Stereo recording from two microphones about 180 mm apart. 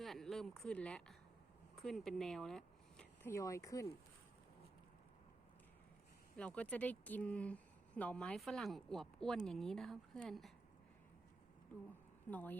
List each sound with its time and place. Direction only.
0.0 s speech: centre (ahead or behind)
3.3 s speech: 15° left (ahead or behind)
6.3 s speech: 5° left (ahead or behind)
12.3 s speech: 10° left (ahead or behind)